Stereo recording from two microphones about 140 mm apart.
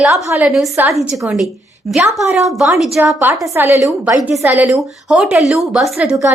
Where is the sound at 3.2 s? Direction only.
15° right (ahead or behind).